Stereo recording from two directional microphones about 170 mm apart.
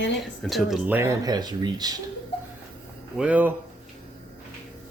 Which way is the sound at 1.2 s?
25° right (ahead or behind).